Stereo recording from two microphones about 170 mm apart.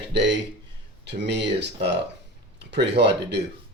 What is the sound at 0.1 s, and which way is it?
Speech, 90° right.